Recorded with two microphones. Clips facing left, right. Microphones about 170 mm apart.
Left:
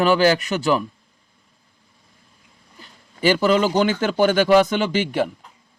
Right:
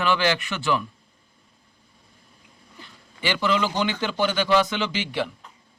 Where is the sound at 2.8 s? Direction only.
40° left (ahead or behind).